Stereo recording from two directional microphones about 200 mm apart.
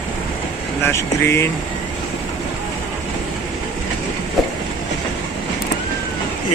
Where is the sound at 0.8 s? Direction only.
10° left (ahead or behind).